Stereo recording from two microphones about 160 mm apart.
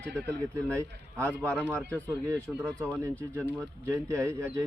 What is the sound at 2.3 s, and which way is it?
Speech, 10° right (ahead or behind).